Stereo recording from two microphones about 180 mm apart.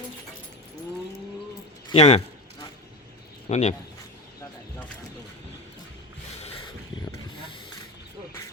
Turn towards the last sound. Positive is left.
turn(degrees=35)  # may be behind; listen again after turning